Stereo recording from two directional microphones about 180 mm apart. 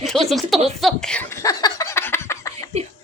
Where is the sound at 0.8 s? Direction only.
5° left (ahead or behind).